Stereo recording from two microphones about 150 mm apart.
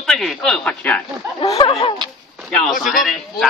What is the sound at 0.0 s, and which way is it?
Speech, centre (ahead or behind).